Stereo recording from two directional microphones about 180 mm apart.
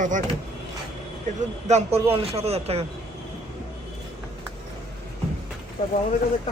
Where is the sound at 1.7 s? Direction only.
35° right (ahead or behind).